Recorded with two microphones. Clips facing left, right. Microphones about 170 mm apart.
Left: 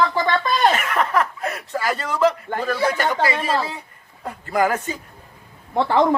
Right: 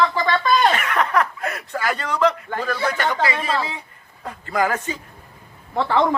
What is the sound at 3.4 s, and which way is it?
Speech, 45° left (ahead or behind).